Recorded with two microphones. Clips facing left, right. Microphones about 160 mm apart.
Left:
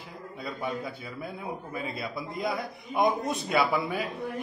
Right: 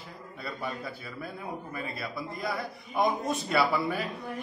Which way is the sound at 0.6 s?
20° left (ahead or behind).